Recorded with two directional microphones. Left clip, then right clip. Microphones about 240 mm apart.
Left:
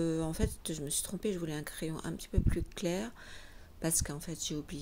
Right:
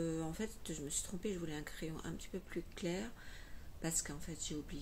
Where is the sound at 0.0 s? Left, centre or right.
Left.